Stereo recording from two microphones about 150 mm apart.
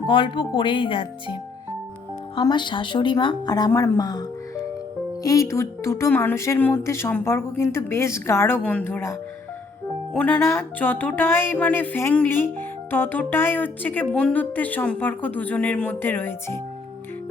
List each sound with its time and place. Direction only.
0.0 s a woman's voice: 35° left (ahead or behind); by 9.1 s 15° left (ahead or behind)
10.2 s speech: 10° left (ahead or behind)